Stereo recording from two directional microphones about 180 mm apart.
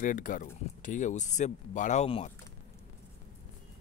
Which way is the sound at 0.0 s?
50° left (ahead or behind).